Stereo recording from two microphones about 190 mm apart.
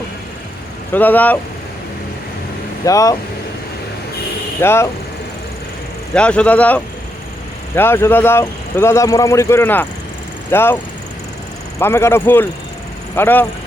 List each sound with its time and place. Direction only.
0.9 s speech: 10° left (ahead or behind)
2.8 s speech: 15° left (ahead or behind)
4.6 s speech: 15° left (ahead or behind)
6.1 s speech: 5° left (ahead or behind)
11.8 s speech: 15° left (ahead or behind)